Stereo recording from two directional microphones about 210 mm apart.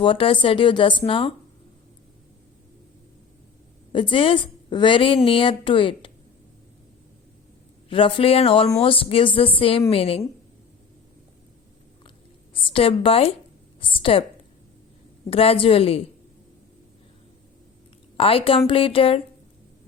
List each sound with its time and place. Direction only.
0.0 s a woman's voice: 25° left (ahead or behind)
3.9 s a woman's voice: 25° left (ahead or behind)
7.9 s a woman's voice: 25° left (ahead or behind)
12.6 s a woman's voice: 25° left (ahead or behind)
15.3 s a woman's voice: 25° left (ahead or behind)
18.2 s a woman's voice: 25° left (ahead or behind)